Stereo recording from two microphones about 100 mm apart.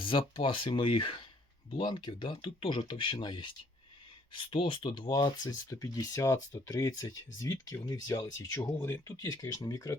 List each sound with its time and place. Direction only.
0.0 s speech: 60° left (ahead or behind); by 10.0 s 30° left (ahead or behind)